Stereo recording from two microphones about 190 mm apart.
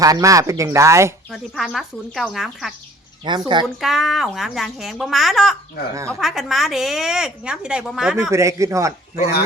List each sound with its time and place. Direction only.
0.0 s speech: 15° right (ahead or behind)
1.3 s a woman's voice: centre (ahead or behind)
3.2 s speech: 25° right (ahead or behind)
3.8 s a woman's voice: centre (ahead or behind)
5.9 s speech: 15° right (ahead or behind)
6.1 s a woman's voice: centre (ahead or behind)
8.3 s speech: 15° right (ahead or behind)